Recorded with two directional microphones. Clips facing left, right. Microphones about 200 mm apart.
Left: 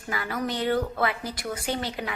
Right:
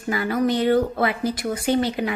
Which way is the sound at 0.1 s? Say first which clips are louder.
Right 8 dB; 25° right (ahead or behind).